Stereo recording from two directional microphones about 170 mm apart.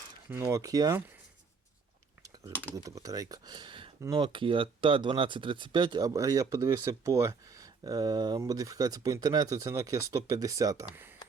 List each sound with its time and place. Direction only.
0.3 s speech: 10° right (ahead or behind)
2.6 s speech: 20° right (ahead or behind)